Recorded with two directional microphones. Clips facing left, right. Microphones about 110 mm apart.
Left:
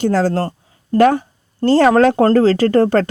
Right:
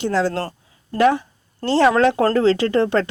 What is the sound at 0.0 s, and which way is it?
Speech, 45° left (ahead or behind).